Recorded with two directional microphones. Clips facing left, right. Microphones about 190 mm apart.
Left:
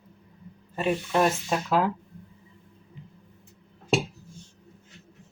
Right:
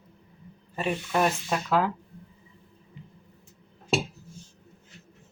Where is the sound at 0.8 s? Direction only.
5° left (ahead or behind).